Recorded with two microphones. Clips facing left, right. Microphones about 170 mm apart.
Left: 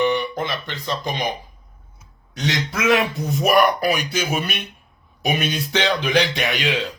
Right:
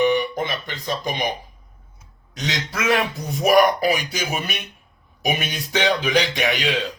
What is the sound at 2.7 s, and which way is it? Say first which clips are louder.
Speech: left 2 dB; centre (ahead or behind).